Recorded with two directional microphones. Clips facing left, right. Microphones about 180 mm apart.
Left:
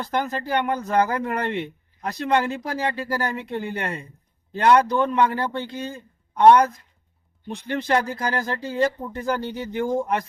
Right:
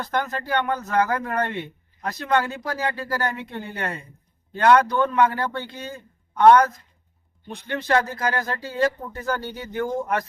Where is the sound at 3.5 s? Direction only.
30° left (ahead or behind).